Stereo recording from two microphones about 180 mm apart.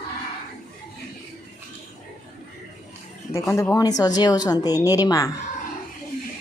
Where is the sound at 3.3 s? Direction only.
15° left (ahead or behind).